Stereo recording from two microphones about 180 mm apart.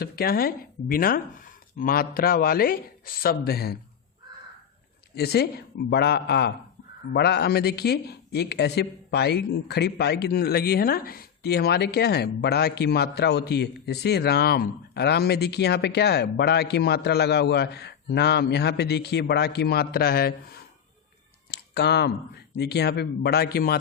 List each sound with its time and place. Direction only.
0.0 s a man's voice: 55° left (ahead or behind)
5.1 s a man's voice: 65° left (ahead or behind)
21.5 s a sound: 65° left (ahead or behind)
22.5 s a man's voice: 65° left (ahead or behind)